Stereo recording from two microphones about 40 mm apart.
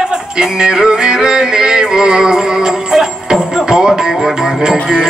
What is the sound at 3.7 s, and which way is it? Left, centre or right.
Music, centre.